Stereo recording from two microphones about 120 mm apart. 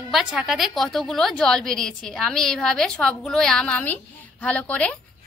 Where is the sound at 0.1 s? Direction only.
5° right (ahead or behind).